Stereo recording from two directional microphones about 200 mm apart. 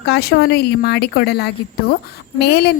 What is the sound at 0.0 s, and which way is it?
A woman's voice, 55° left (ahead or behind).